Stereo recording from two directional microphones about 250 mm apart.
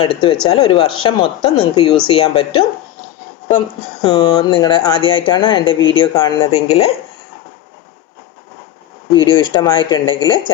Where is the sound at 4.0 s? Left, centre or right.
Centre.